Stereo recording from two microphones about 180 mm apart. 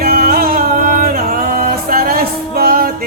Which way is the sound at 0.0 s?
55° right (ahead or behind).